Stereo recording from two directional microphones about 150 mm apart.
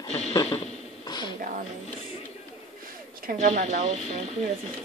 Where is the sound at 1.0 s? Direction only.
30° left (ahead or behind).